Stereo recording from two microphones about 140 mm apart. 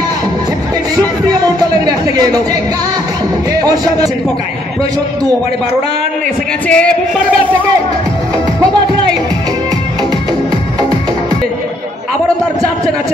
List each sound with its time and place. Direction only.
1.3 s speech: 30° right (ahead or behind)
3.6 s a man's voice: 25° right (ahead or behind)
6.7 s music: 10° left (ahead or behind)